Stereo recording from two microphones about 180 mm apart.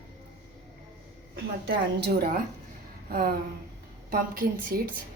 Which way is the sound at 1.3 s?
60° right (ahead or behind).